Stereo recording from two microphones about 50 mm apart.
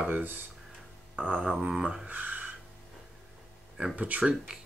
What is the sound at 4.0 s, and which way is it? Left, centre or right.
Speech, right.